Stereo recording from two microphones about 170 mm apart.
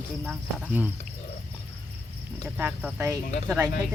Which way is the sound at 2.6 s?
10° right (ahead or behind).